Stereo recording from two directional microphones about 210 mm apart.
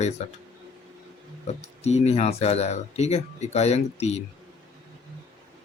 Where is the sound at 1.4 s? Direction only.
30° left (ahead or behind).